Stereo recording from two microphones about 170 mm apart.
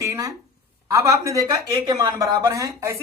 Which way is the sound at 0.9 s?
20° right (ahead or behind).